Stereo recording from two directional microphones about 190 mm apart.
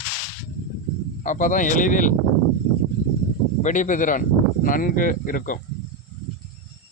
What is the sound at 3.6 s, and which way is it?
Speech, 40° left (ahead or behind).